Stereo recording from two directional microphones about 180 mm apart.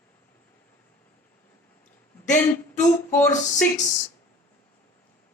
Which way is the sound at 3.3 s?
40° left (ahead or behind).